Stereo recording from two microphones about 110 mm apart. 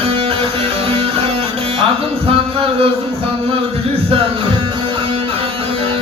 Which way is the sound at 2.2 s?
60° right (ahead or behind).